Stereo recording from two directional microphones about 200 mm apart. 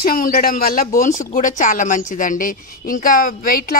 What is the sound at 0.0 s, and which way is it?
A woman's voice, 45° left (ahead or behind).